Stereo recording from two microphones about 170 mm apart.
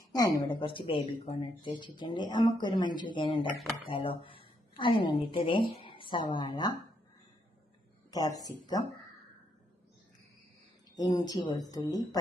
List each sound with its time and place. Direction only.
0.1 s a woman's voice: 25° left (ahead or behind)
8.1 s speech: 20° left (ahead or behind)
10.9 s speech: 25° left (ahead or behind)